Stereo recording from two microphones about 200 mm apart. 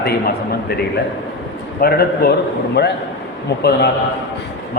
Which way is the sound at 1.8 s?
50° left (ahead or behind).